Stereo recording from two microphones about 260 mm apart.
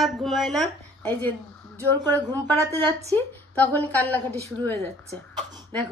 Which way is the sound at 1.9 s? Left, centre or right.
Centre.